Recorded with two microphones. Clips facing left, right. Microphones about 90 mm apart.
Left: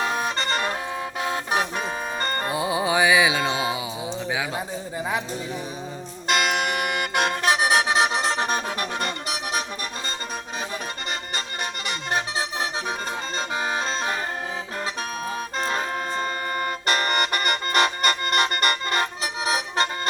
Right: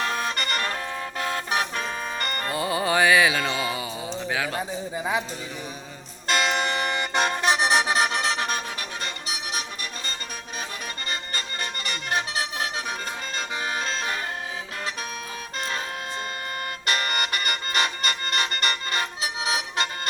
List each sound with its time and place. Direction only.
0.0 s vehicle: 15° left (ahead or behind)
1.5 s music: 10° left (ahead or behind)
2.1 s music: 25° left (ahead or behind)
2.5 s music: 10° left (ahead or behind)
6.2 s music: 10° left (ahead or behind)
8.1 s music: 25° left (ahead or behind)
9.0 s music: 50° left (ahead or behind)
11.3 s music: 20° left (ahead or behind)
15.5 s music: 40° left (ahead or behind)